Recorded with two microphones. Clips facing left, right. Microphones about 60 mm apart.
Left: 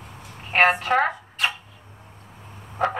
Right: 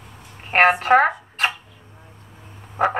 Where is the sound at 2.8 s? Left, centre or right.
Right.